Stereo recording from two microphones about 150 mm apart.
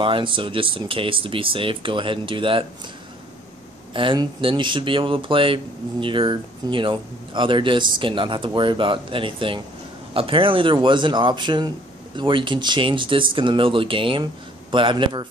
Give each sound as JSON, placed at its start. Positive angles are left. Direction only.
{"t": 0.0, "sound": "speech", "side_deg": -35}
{"t": 3.9, "sound": "speech", "side_deg": -35}